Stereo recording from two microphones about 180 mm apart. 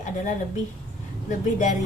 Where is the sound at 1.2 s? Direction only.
45° left (ahead or behind).